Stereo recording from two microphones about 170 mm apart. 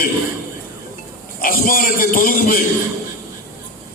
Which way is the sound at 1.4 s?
55° left (ahead or behind).